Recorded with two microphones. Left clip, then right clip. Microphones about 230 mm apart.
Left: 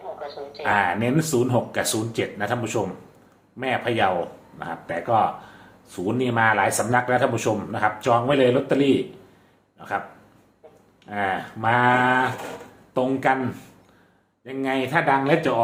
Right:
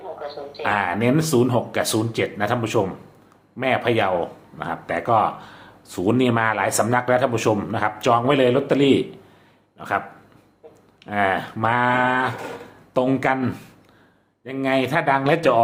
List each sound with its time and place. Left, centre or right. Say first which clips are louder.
0.2 s speech: right 2 dB; centre
11.0 s speech: right 4 dB; right